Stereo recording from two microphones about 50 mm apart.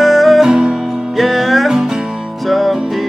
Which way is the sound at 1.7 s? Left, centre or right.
Centre.